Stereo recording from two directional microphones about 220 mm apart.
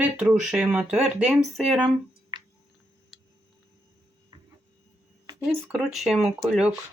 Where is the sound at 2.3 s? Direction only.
20° right (ahead or behind).